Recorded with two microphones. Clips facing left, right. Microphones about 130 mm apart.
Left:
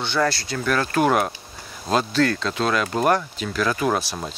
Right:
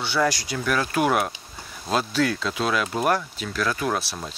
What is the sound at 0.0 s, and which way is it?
Speech, 5° right (ahead or behind).